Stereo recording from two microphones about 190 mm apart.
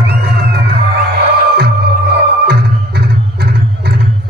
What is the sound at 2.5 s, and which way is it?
Music, 55° right (ahead or behind).